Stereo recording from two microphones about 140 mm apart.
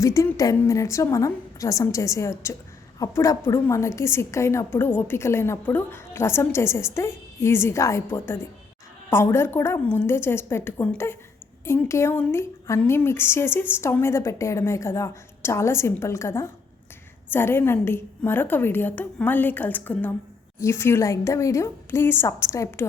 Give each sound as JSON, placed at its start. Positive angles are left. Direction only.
{"t": 0.0, "sound": "a woman's voice", "side_deg": 20}